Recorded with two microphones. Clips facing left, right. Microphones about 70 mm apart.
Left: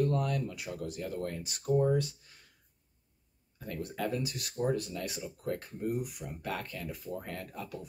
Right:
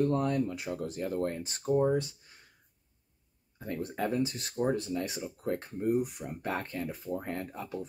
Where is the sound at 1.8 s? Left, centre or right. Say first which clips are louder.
Right 1 dB; right.